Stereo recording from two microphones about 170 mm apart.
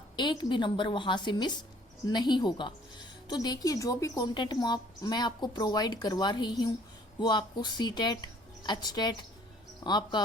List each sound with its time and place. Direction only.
0.2 s a woman's voice: 25° left (ahead or behind)